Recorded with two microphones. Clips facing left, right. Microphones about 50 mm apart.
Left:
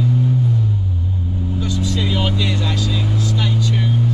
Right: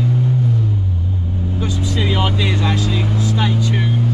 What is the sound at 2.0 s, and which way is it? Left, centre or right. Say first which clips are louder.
Speech: right 4 dB; centre.